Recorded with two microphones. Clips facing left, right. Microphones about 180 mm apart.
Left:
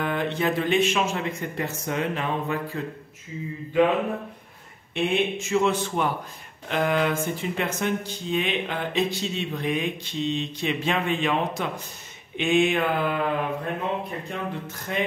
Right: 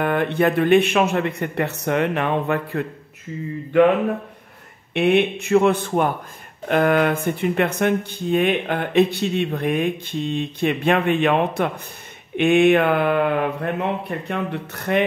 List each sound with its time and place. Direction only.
0.0 s speech: 55° right (ahead or behind)
4.9 s speech: 65° right (ahead or behind)